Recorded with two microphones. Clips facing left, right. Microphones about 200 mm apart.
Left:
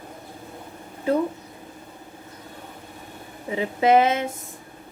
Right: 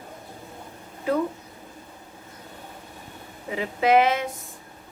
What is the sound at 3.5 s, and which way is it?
Speech, 25° left (ahead or behind).